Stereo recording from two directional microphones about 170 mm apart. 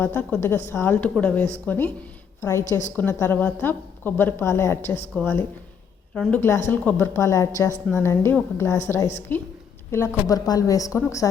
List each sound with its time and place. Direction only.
0.0 s a woman's voice: 10° left (ahead or behind)